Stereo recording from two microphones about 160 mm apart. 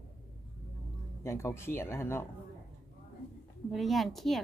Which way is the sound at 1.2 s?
15° left (ahead or behind).